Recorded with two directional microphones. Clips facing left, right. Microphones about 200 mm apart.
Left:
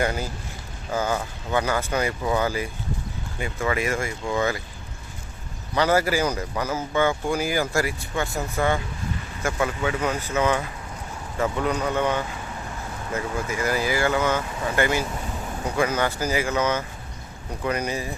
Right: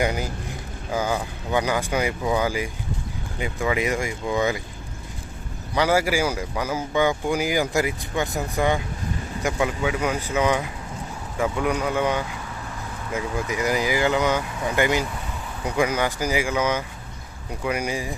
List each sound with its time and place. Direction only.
0.0 s speech: 15° right (ahead or behind)
5.7 s speech: 10° right (ahead or behind)